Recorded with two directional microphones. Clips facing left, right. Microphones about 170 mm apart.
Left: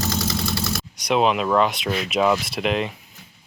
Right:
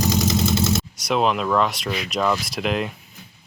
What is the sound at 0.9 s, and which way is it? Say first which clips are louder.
Speech: left 4 dB; centre (ahead or behind).